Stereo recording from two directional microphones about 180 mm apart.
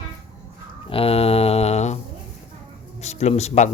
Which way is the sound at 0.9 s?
30° left (ahead or behind).